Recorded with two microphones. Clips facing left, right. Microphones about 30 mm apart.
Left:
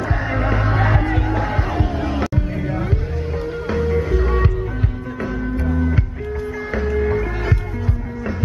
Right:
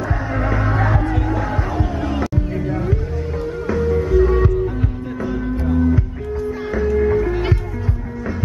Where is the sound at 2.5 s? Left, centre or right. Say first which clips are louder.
Right 1 dB; centre.